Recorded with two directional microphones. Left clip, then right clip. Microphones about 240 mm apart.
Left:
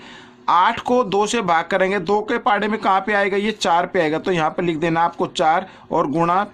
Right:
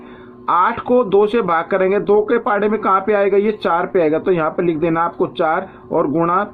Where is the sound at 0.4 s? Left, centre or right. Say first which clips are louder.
Right 1 dB; left.